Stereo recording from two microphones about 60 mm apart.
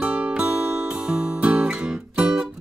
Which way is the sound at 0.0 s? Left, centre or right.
Right.